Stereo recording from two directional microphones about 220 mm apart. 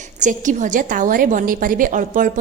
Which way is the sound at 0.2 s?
35° right (ahead or behind).